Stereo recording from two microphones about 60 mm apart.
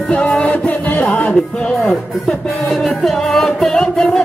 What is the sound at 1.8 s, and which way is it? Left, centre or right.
Music, centre.